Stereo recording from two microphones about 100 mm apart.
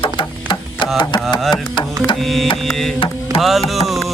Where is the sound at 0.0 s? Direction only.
50° left (ahead or behind).